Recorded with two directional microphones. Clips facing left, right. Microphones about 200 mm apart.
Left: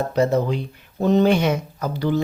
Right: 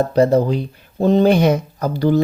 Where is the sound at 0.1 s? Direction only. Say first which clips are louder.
Right 5 dB; 35° right (ahead or behind).